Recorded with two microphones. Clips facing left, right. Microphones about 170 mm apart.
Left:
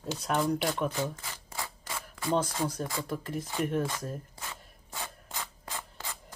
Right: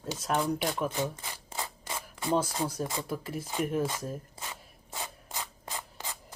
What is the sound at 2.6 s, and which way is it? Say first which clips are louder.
Speech: even; 10° right (ahead or behind).